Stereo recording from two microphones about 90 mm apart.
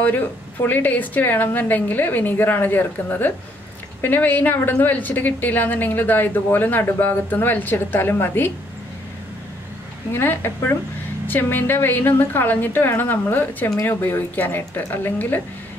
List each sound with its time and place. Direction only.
0.0 s a woman's voice: 20° left (ahead or behind)
10.1 s a woman's voice: 25° left (ahead or behind)